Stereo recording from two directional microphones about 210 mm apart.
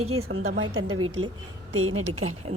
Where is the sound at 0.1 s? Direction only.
80° right.